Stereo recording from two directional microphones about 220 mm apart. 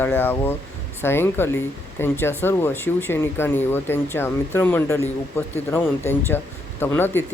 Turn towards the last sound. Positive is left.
turn(degrees=10)  # may be behind; listen again after turning